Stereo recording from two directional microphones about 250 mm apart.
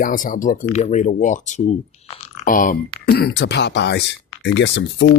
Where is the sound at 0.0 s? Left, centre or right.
Left.